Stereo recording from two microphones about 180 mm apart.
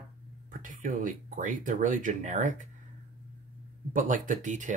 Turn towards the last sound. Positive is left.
turn(degrees=-45)  # may be behind; listen again after turning